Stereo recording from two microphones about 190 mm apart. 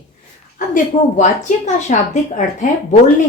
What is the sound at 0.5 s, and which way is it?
A woman's voice, 45° left (ahead or behind).